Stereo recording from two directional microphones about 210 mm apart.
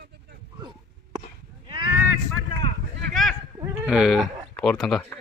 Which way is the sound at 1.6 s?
20° right (ahead or behind).